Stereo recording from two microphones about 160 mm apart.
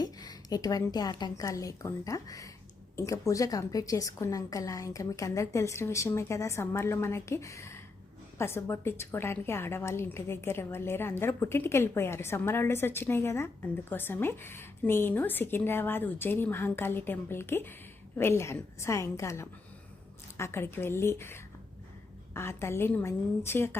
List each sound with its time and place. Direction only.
0.0 s a woman's voice: 25° left (ahead or behind)